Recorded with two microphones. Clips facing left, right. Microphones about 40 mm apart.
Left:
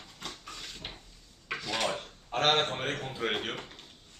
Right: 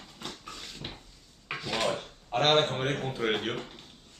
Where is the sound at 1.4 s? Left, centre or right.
Centre.